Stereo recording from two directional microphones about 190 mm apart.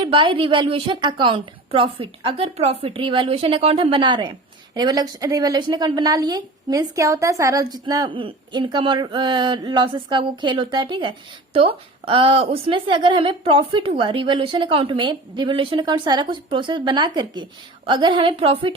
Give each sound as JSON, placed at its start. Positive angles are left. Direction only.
{"t": 0.0, "sound": "a woman's voice", "side_deg": -25}